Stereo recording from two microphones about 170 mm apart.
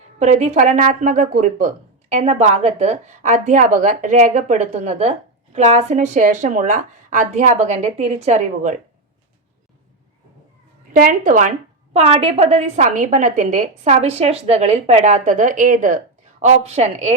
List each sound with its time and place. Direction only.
0.2 s speech: 40° right (ahead or behind)
11.0 s speech: 50° right (ahead or behind)
11.9 s a woman's voice: 35° right (ahead or behind)